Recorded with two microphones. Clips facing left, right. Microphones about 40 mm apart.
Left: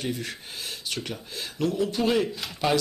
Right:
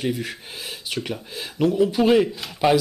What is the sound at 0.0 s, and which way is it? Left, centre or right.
Speech, centre.